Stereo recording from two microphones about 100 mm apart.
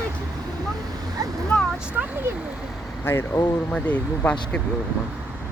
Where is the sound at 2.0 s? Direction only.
15° right (ahead or behind).